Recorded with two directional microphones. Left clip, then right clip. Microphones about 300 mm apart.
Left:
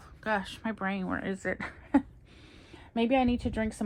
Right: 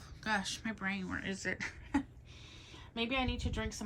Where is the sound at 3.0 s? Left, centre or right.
Left.